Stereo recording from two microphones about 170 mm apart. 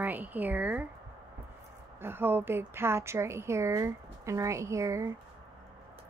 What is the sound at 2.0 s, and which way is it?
A woman's voice, 15° right (ahead or behind).